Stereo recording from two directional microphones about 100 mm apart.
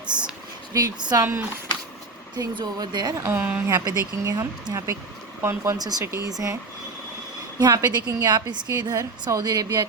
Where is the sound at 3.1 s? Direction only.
25° right (ahead or behind).